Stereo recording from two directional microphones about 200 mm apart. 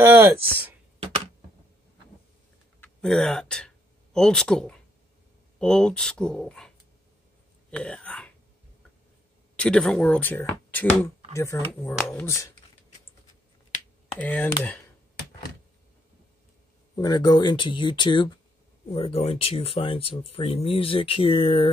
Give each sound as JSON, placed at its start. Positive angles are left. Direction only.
{"t": 0.0, "sound": "speech", "side_deg": -10}
{"t": 2.8, "sound": "speech", "side_deg": 5}
{"t": 7.7, "sound": "speech", "side_deg": 5}
{"t": 9.6, "sound": "speech", "side_deg": 5}
{"t": 14.1, "sound": "speech", "side_deg": 10}
{"t": 16.9, "sound": "speech", "side_deg": 20}